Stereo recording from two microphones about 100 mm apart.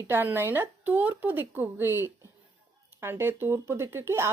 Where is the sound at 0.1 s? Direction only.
20° right (ahead or behind).